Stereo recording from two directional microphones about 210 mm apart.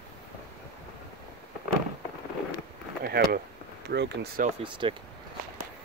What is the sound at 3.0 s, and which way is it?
Speech, 45° right (ahead or behind).